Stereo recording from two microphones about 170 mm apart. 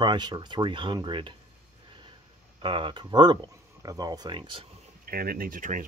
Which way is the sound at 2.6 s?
30° right (ahead or behind).